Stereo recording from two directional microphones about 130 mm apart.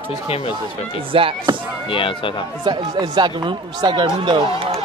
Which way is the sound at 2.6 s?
35° right (ahead or behind).